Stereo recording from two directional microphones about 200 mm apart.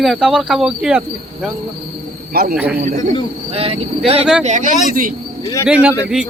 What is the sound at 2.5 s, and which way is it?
Speech, 10° right (ahead or behind).